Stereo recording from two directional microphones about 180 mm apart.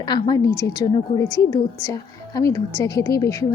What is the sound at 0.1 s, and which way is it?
A woman's voice, 20° left (ahead or behind).